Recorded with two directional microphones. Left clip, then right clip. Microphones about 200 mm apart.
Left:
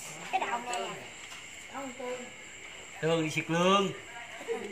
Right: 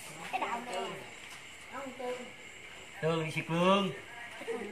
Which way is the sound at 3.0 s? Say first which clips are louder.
Left 3 dB; 35° left (ahead or behind).